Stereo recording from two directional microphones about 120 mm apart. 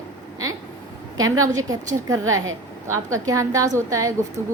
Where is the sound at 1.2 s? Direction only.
30° right (ahead or behind).